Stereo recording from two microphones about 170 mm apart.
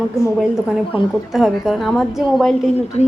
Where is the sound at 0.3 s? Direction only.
5° right (ahead or behind).